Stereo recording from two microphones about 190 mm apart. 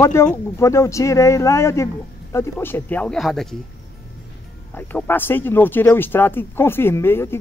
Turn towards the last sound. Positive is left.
turn(degrees=10)  # may be behind; listen again after turning